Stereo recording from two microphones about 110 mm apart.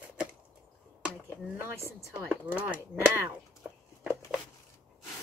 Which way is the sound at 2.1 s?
10° right (ahead or behind).